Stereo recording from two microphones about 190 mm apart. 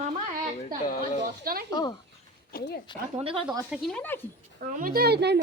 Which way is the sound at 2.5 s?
55° left (ahead or behind).